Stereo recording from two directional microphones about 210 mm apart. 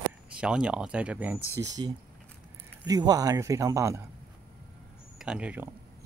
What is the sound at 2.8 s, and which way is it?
A man's voice, 20° right (ahead or behind).